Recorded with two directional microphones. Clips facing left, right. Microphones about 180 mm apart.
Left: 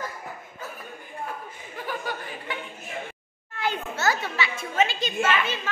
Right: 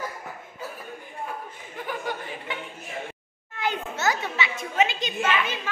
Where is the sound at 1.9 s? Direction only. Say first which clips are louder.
Right 1 dB; 20° right (ahead or behind).